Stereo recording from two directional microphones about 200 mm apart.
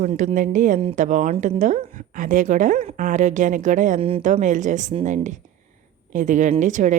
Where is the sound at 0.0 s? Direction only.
35° right (ahead or behind).